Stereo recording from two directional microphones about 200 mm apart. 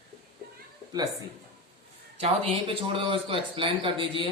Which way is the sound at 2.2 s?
25° right (ahead or behind).